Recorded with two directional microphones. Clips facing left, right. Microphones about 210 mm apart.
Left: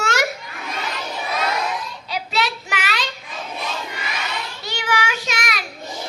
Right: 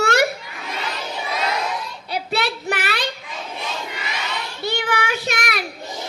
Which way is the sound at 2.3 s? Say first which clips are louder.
Right 2 dB; 55° right (ahead or behind).